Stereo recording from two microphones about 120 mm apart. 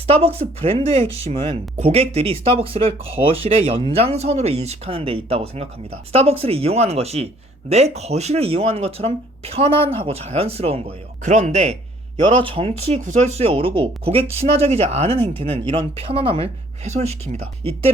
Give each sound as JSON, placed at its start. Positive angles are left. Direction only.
{"t": 0.1, "sound": "speech", "side_deg": -55}
{"t": 12.1, "sound": "speech", "side_deg": -45}
{"t": 16.8, "sound": "speech", "side_deg": -65}